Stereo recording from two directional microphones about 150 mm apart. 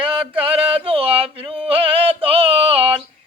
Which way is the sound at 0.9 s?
40° right (ahead or behind).